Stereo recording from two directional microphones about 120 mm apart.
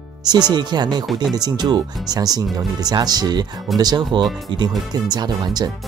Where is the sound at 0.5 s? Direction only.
35° right (ahead or behind).